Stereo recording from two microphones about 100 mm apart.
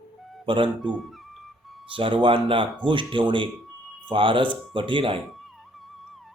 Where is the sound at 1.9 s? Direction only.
55° right (ahead or behind).